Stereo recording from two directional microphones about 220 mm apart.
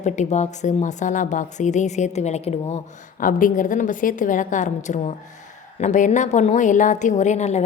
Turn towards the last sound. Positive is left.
turn(degrees=30)  # may be behind; listen again after turning